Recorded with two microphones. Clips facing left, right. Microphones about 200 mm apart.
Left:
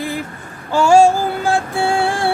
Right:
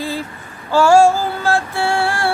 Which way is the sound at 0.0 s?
15° left (ahead or behind).